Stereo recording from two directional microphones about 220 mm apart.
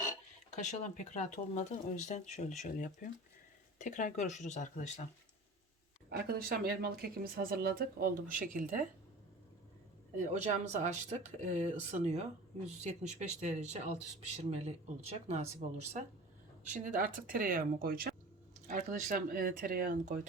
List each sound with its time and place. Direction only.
0.5 s speech: 35° left (ahead or behind)
6.1 s speech: 45° right (ahead or behind)
10.2 s speech: 30° right (ahead or behind)